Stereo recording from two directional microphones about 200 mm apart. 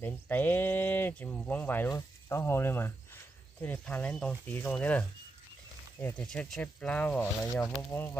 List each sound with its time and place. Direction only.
0.0 s speech: 10° left (ahead or behind)